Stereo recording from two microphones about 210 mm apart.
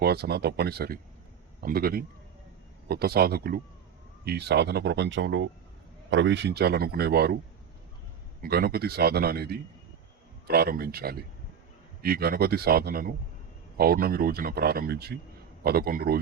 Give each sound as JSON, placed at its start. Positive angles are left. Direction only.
{"t": 0.0, "sound": "a man's voice", "side_deg": -50}
{"t": 8.4, "sound": "a man's voice", "side_deg": -45}